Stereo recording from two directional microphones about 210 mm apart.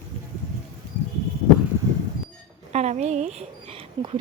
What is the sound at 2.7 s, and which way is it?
Speech, 30° right (ahead or behind).